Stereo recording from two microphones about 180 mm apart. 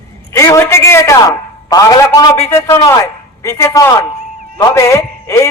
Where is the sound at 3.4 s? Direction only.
15° left (ahead or behind).